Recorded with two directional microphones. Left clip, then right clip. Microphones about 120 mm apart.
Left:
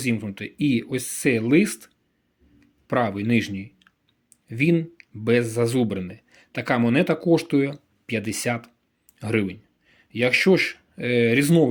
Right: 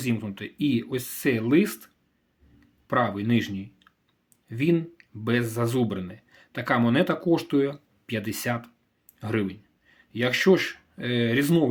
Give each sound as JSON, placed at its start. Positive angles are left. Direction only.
{"t": 0.0, "sound": "speech", "side_deg": 20}